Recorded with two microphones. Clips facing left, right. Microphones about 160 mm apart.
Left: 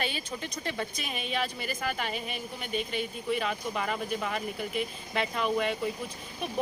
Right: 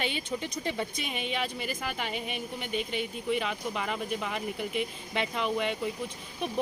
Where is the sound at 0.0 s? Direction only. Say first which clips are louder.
Right 2 dB; 20° right (ahead or behind).